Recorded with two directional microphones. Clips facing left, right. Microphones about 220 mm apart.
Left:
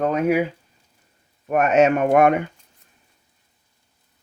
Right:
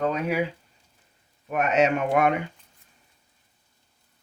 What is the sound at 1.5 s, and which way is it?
Speech, 50° left (ahead or behind).